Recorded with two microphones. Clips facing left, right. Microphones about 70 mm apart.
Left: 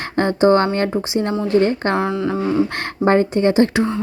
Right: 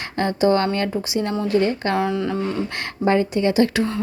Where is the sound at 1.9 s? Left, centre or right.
Centre.